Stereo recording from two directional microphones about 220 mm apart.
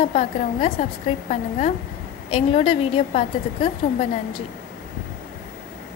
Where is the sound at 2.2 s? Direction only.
25° left (ahead or behind).